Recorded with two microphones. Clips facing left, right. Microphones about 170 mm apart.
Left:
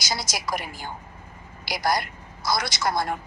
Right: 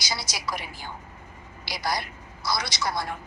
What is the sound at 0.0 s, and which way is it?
A woman's voice, 45° left (ahead or behind).